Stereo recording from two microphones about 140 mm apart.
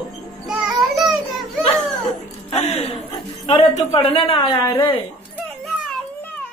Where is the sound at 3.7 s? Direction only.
45° left (ahead or behind).